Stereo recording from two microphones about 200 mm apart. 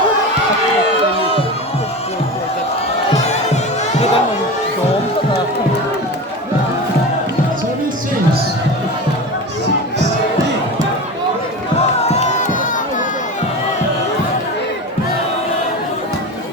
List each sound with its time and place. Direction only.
3.2 s music: 35° left (ahead or behind)
12.0 s music: 35° left (ahead or behind)